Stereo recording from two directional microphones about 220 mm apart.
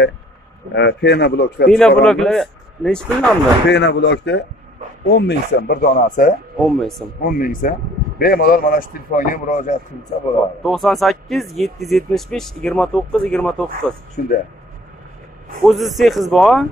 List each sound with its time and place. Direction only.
0.7 s speech: 50° left (ahead or behind)
1.7 s speech: 5° left (ahead or behind)
3.6 s speech: 50° left (ahead or behind)
6.7 s speech: centre (ahead or behind)
7.2 s a man's voice: 40° left (ahead or behind)
10.6 s speech: centre (ahead or behind)
14.2 s a man's voice: 40° left (ahead or behind)
15.6 s speech: centre (ahead or behind)